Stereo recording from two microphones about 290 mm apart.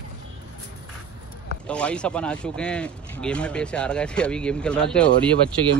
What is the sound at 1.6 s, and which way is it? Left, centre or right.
Speech, centre.